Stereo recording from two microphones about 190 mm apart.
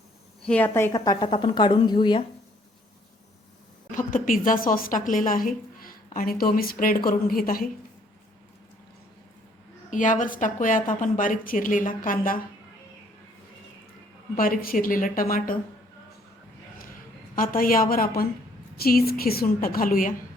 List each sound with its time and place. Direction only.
0.4 s a woman's voice: 10° left (ahead or behind); by 2.2 s 25° left (ahead or behind)
3.9 s a woman's voice: 45° left (ahead or behind)
9.9 s a woman's voice: 40° left (ahead or behind)
14.3 s a woman's voice: 50° left (ahead or behind)
17.3 s a woman's voice: 50° left (ahead or behind)